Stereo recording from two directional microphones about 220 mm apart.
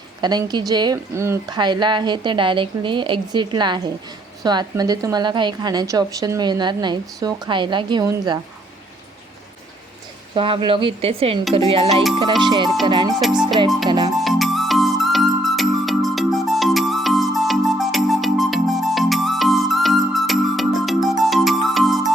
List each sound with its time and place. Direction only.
0.2 s a woman's voice: 20° right (ahead or behind)
10.3 s a woman's voice: 25° right (ahead or behind)
14.2 s music: centre (ahead or behind)